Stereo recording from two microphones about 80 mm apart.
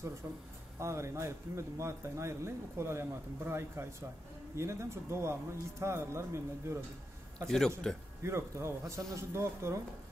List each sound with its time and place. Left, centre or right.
0.7 s speech: right
7.4 s a man's voice: centre
8.2 s speech: right